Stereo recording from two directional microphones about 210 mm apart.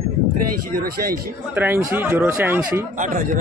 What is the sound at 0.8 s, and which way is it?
Speech, 45° right (ahead or behind).